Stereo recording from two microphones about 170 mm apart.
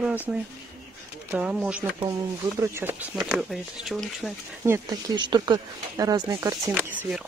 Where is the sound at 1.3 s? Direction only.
5° right (ahead or behind).